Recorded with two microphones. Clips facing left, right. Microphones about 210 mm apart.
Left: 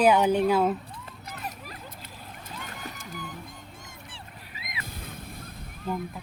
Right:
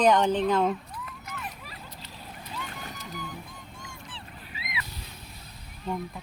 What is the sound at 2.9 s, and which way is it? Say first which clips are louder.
Printer: even; 50° left (ahead or behind).